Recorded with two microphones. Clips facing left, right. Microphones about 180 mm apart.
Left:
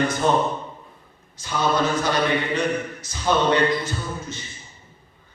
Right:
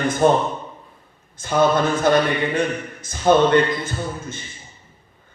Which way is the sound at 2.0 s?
50° right (ahead or behind).